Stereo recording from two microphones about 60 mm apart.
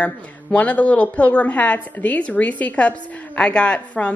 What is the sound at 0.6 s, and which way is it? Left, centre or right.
Speech, left.